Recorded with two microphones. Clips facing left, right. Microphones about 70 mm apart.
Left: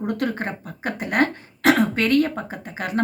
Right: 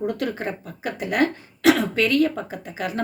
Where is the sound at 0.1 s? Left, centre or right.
Left.